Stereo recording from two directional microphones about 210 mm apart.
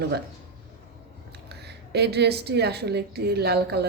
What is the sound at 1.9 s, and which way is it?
Speech, 50° right (ahead or behind).